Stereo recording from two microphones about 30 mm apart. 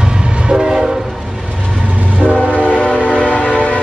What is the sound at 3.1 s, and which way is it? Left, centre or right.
Train, right.